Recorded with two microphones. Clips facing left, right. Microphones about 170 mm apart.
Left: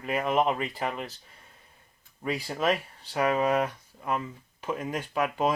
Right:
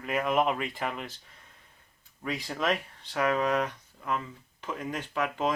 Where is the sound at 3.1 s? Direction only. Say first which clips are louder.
Left 2 dB; 15° left (ahead or behind).